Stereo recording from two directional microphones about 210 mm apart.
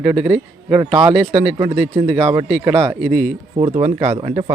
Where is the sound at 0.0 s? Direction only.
5° right (ahead or behind).